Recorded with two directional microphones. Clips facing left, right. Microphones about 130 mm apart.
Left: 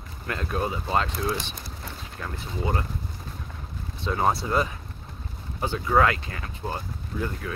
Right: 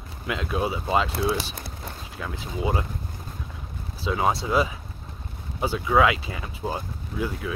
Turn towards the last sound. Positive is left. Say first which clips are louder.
# right 2 dB
turn(degrees=-10)  # may be behind; listen again after turning